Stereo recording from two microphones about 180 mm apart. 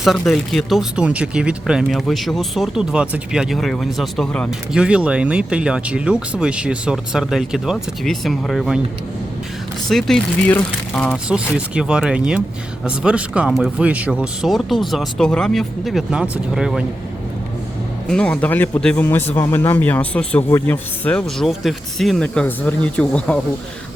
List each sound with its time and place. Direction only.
0.0 s speech: centre (ahead or behind)
9.9 s speech: 5° left (ahead or behind)
11.3 s speech: 5° right (ahead or behind)
18.1 s speech: 5° left (ahead or behind)